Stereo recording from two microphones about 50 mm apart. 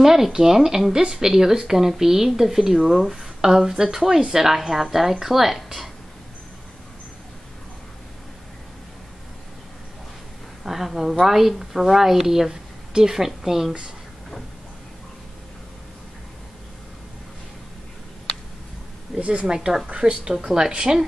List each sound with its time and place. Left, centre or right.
0.0 s speech: centre
10.6 s speech: centre
19.1 s speech: right